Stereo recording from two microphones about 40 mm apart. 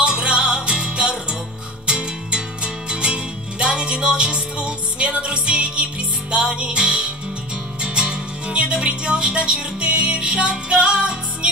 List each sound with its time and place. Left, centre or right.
0.0 s music: right